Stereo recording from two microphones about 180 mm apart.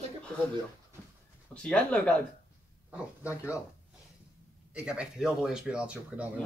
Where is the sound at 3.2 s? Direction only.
15° left (ahead or behind).